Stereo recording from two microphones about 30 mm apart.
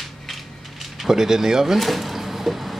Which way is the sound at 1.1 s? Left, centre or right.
Centre.